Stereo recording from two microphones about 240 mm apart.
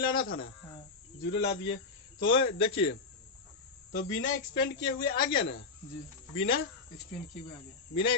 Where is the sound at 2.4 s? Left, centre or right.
Left.